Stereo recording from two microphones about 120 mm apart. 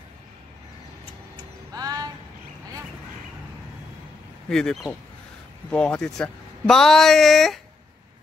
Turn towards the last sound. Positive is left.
turn(degrees=0)  # may be behind; listen again after turning